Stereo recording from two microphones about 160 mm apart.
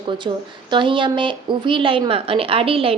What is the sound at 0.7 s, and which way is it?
A woman's voice, 30° right (ahead or behind).